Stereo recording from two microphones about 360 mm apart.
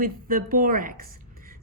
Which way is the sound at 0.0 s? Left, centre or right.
Right.